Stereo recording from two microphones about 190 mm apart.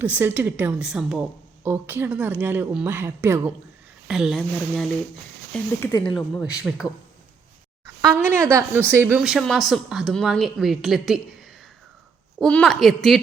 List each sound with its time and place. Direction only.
0.0 s speech: 10° right (ahead or behind)
4.1 s speech: centre (ahead or behind)
5.8 s speech: 20° left (ahead or behind)
6.1 s speech: 5° right (ahead or behind)
8.0 s speech: 10° right (ahead or behind)